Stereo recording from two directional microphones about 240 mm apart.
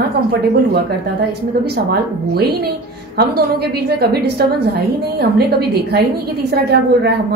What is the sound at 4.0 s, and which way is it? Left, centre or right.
Speech, right.